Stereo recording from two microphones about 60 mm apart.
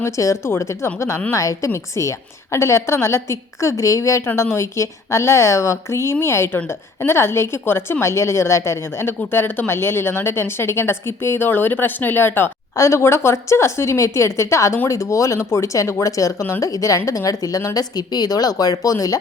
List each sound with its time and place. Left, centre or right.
0.0 s a woman's voice: left
12.7 s a woman's voice: left
13.0 s a woman's voice: left